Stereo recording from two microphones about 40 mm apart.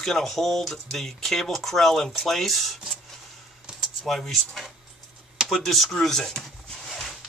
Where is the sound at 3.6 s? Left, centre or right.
Right.